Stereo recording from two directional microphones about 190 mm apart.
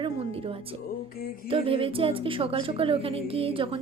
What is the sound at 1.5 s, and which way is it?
A woman's voice, 30° right (ahead or behind).